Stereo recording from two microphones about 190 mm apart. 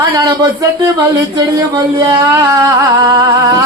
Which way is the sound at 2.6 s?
15° right (ahead or behind).